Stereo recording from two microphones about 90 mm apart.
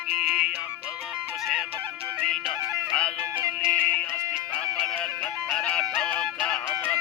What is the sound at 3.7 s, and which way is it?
Music, 15° left (ahead or behind).